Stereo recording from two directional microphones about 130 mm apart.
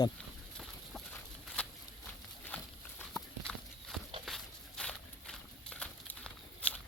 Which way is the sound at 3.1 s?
Centre (ahead or behind).